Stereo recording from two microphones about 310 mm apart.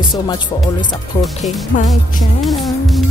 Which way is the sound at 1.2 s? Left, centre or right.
Centre.